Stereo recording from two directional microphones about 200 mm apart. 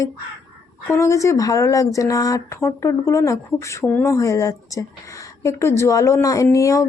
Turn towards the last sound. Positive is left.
turn(degrees=15)  # may be behind; listen again after turning